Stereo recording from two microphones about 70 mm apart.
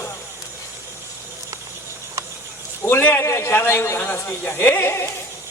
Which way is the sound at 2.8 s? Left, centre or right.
Left.